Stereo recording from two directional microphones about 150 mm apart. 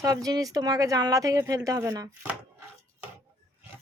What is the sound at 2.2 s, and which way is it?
Chopping, 10° right (ahead or behind).